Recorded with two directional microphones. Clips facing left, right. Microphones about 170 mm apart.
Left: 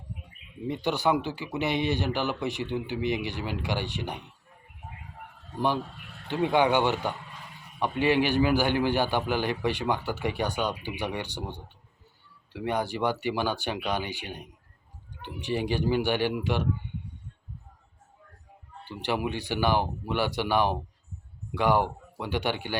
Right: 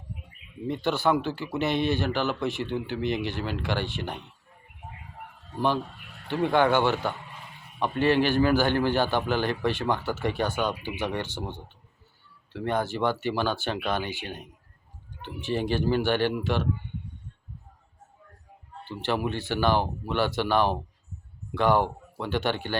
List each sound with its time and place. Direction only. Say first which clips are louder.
0.7 s a man's voice: right 1 dB; 15° left (ahead or behind)
6.2 s a man's voice: right 1 dB; 15° left (ahead or behind)
18.9 s a man's voice: right 1 dB; 15° left (ahead or behind)